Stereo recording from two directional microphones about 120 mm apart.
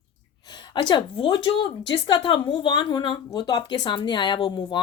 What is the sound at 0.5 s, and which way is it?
Speech, 40° left (ahead or behind).